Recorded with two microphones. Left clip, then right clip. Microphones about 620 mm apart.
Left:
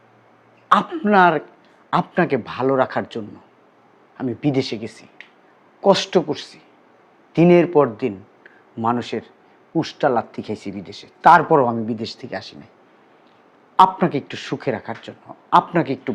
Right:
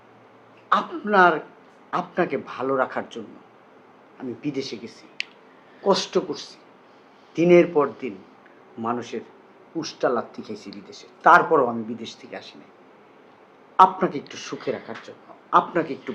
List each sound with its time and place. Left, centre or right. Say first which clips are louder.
0.7 s speech: left 5 dB; left
4.4 s speech: left 8 dB; left
13.7 s speech: left 2 dB; left